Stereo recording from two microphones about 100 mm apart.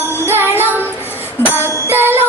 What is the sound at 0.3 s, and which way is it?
Music, 20° right (ahead or behind).